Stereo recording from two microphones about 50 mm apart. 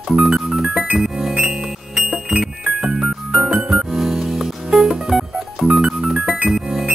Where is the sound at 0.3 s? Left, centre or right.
Centre.